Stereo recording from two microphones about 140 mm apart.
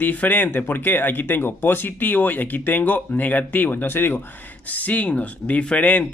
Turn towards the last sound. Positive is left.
turn(degrees=10)  # may be behind; listen again after turning